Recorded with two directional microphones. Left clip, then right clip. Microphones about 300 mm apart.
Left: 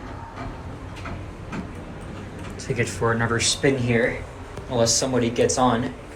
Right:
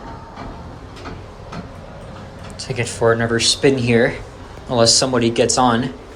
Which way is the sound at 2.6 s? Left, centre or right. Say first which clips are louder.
Right 6 dB; centre.